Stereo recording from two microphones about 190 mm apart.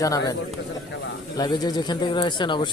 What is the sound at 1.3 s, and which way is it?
A man's voice, 20° left (ahead or behind).